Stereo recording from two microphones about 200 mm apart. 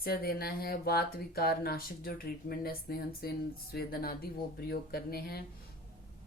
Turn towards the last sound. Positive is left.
turn(degrees=50)  # may be behind; listen again after turning